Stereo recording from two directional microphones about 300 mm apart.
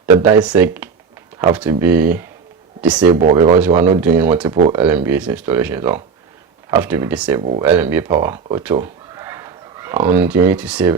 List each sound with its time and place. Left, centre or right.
0.0 s a sound: centre
0.3 s speech: centre
3.3 s speech: right
3.9 s speech: centre